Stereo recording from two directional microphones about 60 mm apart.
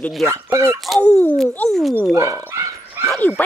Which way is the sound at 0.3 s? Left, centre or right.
Right.